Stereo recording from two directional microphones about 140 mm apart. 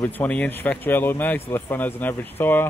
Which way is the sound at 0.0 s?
10° left (ahead or behind).